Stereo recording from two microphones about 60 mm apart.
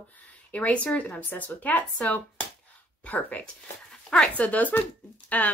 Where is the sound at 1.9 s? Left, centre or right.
Centre.